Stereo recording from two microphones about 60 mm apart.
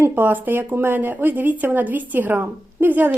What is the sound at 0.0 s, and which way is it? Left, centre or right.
A woman's voice, right.